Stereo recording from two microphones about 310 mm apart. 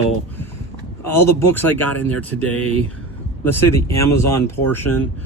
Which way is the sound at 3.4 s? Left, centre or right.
Centre.